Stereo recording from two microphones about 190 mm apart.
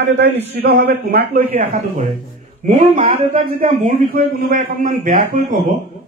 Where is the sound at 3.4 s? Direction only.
35° right (ahead or behind).